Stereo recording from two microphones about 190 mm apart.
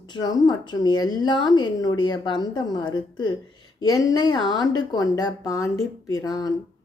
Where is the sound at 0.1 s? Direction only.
20° left (ahead or behind).